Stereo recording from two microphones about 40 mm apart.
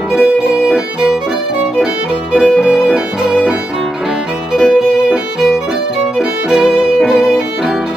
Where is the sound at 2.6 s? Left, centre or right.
Centre.